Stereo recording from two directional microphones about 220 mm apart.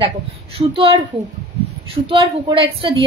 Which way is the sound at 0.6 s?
25° right (ahead or behind).